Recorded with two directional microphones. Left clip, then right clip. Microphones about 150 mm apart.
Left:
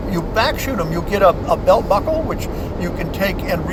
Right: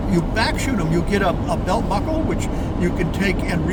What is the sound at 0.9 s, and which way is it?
Speech, 20° right (ahead or behind).